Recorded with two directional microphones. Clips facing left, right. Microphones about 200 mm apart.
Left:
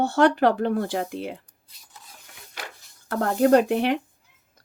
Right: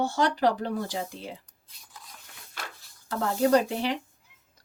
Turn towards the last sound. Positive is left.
turn(degrees=55)  # may be behind; listen again after turning